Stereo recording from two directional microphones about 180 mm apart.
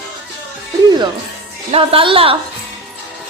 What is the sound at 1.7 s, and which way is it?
Speech, 30° right (ahead or behind).